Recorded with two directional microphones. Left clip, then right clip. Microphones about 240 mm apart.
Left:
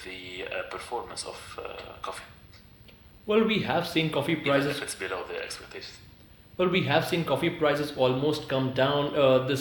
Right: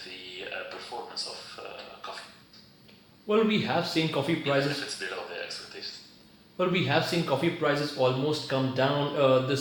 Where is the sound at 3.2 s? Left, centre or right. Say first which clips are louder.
Left 1 dB; left.